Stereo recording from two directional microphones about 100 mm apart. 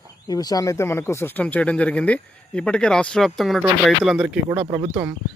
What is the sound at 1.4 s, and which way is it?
Speech, 15° left (ahead or behind).